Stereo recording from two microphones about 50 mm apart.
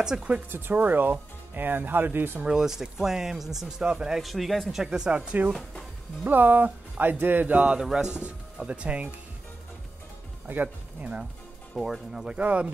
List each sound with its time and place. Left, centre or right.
0.0 s speech: centre
0.5 s speech: right
2.4 s speech: centre
4.2 s speech: centre
4.8 s speech: centre
5.5 s speech: centre
6.2 s speech: right
7.9 s speech: centre
10.5 s speech: right
11.7 s speech: centre
12.4 s speech: right